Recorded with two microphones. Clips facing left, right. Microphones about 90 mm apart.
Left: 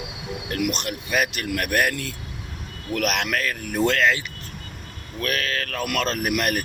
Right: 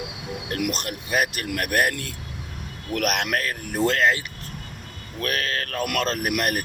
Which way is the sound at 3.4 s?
30° right (ahead or behind).